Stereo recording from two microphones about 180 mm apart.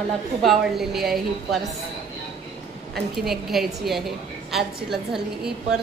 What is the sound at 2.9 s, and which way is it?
A woman's voice, centre (ahead or behind).